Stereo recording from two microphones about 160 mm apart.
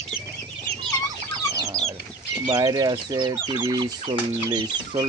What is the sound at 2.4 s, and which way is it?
Speech, 25° right (ahead or behind).